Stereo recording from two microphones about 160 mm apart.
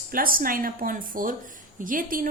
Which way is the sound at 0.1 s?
65° right (ahead or behind).